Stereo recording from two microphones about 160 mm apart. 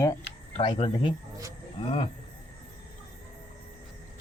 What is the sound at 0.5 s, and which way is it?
Speech, 35° left (ahead or behind).